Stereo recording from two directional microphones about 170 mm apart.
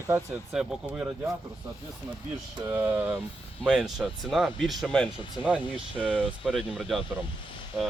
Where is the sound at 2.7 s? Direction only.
15° right (ahead or behind).